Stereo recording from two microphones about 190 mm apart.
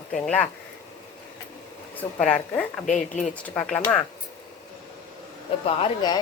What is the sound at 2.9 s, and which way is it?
Speech, 40° left (ahead or behind).